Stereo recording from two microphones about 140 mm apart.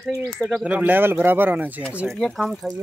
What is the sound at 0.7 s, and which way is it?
Speech, 15° right (ahead or behind).